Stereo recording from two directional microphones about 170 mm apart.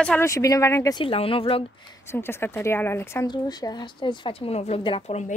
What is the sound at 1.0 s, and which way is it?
Speech, 30° left (ahead or behind).